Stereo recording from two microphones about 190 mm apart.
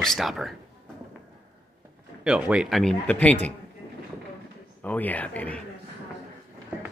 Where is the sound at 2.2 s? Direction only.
5° right (ahead or behind).